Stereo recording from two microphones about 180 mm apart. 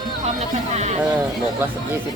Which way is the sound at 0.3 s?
40° right (ahead or behind).